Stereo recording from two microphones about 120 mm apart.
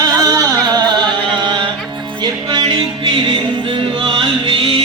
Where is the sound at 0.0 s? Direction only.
30° right (ahead or behind).